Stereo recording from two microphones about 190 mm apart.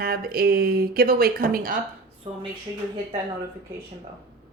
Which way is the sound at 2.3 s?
30° right (ahead or behind).